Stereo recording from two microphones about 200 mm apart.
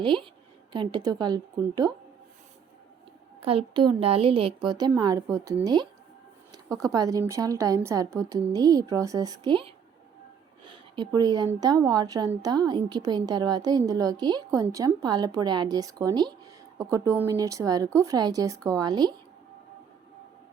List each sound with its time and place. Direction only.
0.0 s a woman's voice: 25° right (ahead or behind)
3.4 s a woman's voice: 30° right (ahead or behind)